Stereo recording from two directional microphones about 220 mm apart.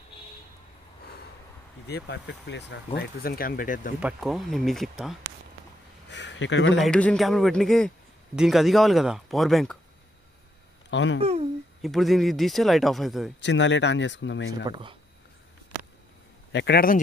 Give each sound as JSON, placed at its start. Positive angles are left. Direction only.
{"t": 1.9, "sound": "speech", "side_deg": 50}
{"t": 4.0, "sound": "speech", "side_deg": 0}
{"t": 6.0, "sound": "a sound", "side_deg": 55}
{"t": 6.8, "sound": "speech", "side_deg": 5}
{"t": 10.9, "sound": "speech", "side_deg": 55}
{"t": 11.1, "sound": "speech", "side_deg": -25}
{"t": 11.8, "sound": "speech", "side_deg": 0}
{"t": 13.4, "sound": "speech", "side_deg": 55}
{"t": 14.5, "sound": "speech", "side_deg": -20}
{"t": 16.5, "sound": "speech", "side_deg": 50}